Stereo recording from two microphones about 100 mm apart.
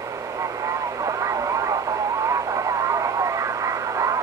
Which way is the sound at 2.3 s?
35° right (ahead or behind).